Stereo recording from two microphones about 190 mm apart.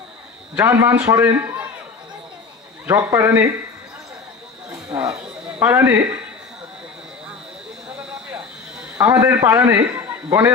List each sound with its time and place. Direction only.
0.5 s a man's voice: 15° right (ahead or behind)
2.8 s a man's voice: 15° right (ahead or behind)
4.9 s a man's voice: 15° right (ahead or behind)
7.9 s a sound: 5° right (ahead or behind)
9.0 s a man's voice: 10° right (ahead or behind)